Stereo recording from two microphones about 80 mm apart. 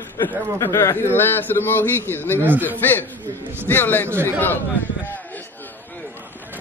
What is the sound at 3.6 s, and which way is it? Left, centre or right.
Speech, left.